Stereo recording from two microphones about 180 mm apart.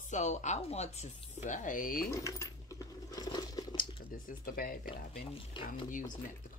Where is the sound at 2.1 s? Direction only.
20° left (ahead or behind).